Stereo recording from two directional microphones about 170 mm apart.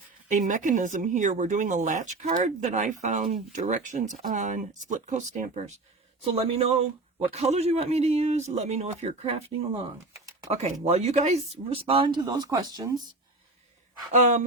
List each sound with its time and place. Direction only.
0.3 s speech: 45° right (ahead or behind); by 12.9 s 25° right (ahead or behind)
14.2 s speech: 45° right (ahead or behind)